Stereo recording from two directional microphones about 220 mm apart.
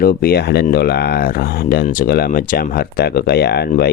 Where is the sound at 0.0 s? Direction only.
40° left (ahead or behind).